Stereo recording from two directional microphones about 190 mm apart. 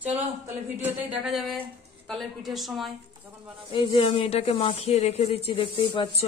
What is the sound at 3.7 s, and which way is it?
Speech, 30° left (ahead or behind).